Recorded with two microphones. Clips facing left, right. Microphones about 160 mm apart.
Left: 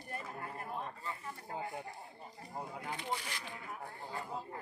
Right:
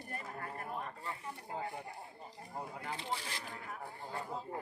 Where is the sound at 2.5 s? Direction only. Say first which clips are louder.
Even; 5° left (ahead or behind).